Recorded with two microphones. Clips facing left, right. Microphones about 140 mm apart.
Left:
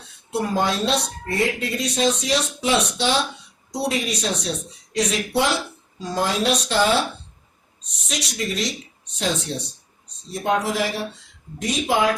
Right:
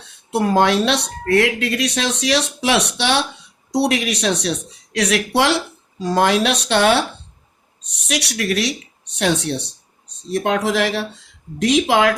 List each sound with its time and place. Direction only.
0.3 s speech: 80° right
10.3 s speech: 90° right